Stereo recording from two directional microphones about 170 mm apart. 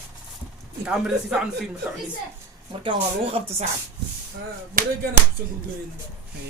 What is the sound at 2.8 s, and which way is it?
Speech, 30° right (ahead or behind).